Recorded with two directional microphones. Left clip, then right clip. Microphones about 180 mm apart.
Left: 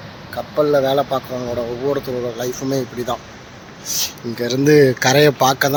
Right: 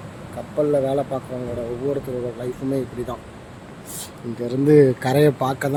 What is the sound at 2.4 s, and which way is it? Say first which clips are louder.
Speech: left 4 dB; centre (ahead or behind).